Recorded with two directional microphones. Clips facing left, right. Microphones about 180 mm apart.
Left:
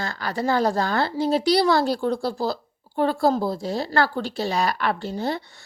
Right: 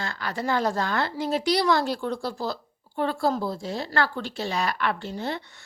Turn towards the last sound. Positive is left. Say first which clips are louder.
# left 4 dB
turn(degrees=35)  # may be behind; listen again after turning